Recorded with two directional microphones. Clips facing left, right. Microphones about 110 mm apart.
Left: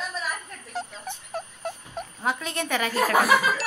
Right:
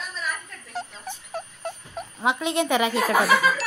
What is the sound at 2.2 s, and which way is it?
Speech, 20° right (ahead or behind).